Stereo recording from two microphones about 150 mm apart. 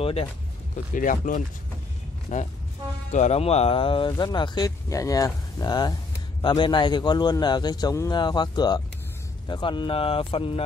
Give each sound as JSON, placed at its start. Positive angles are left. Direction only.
{"t": 0.0, "sound": "speech", "side_deg": 40}
{"t": 0.9, "sound": "a man's voice", "side_deg": 60}